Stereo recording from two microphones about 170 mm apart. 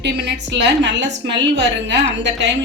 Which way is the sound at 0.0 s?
90° right.